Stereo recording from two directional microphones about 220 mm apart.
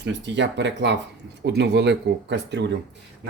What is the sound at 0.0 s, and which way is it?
Speech, 55° right (ahead or behind).